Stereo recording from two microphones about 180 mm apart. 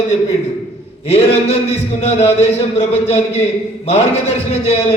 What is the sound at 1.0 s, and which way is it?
Speech, 35° left (ahead or behind).